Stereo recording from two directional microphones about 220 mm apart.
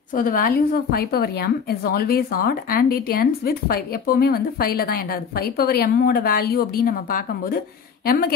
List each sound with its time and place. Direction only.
0.1 s a woman's voice: 40° left (ahead or behind)